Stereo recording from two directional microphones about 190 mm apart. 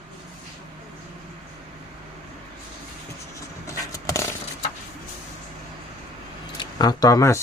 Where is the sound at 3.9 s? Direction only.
15° left (ahead or behind).